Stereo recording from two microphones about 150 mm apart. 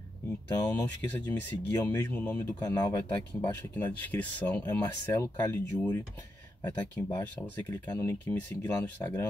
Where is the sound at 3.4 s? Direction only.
10° left (ahead or behind).